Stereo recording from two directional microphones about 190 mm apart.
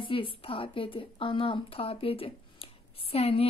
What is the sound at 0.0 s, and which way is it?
A woman's voice, 25° left (ahead or behind).